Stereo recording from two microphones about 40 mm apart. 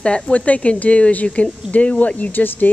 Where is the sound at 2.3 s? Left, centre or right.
Left.